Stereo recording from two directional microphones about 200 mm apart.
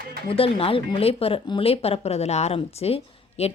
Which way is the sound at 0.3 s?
25° left (ahead or behind).